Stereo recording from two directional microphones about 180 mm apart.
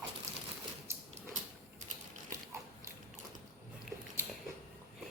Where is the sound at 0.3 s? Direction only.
20° right (ahead or behind).